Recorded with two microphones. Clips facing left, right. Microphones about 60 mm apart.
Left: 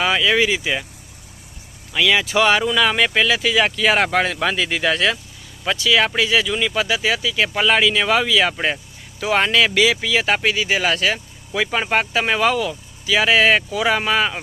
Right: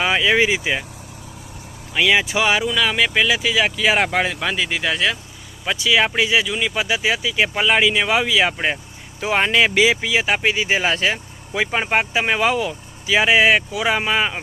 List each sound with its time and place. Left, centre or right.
0.0 s speech: centre
1.9 s speech: centre
2.4 s speech: centre
5.7 s speech: centre
10.4 s speech: right